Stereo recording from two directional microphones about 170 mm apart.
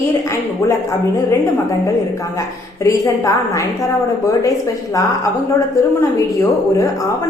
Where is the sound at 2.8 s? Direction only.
20° left (ahead or behind).